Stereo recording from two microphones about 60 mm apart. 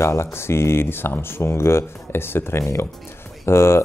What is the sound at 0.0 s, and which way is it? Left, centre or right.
Speech, left.